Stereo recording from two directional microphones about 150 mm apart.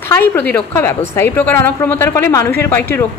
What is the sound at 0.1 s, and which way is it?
A woman's voice, 15° left (ahead or behind).